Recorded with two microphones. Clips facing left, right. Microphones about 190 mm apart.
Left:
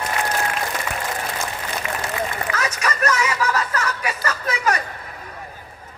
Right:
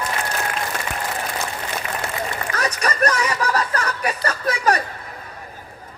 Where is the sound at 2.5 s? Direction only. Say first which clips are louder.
Right 1 dB; 35° right (ahead or behind).